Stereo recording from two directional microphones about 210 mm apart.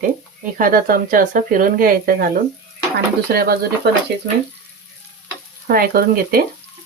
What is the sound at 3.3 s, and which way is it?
Speech, 45° right (ahead or behind).